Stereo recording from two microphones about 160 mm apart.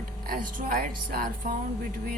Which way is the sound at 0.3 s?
60° right (ahead or behind).